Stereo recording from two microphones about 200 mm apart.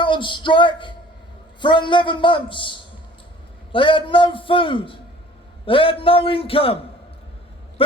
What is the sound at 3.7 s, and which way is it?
A man's voice, 25° left (ahead or behind).